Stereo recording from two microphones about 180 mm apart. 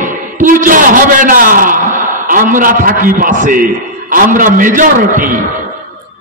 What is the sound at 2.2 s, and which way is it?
A man's voice, 50° right (ahead or behind).